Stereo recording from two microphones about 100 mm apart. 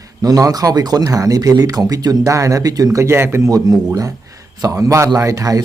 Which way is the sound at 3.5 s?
40° right (ahead or behind).